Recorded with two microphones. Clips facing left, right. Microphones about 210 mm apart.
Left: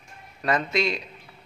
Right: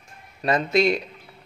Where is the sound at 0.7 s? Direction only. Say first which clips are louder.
Right 6 dB; 55° right (ahead or behind).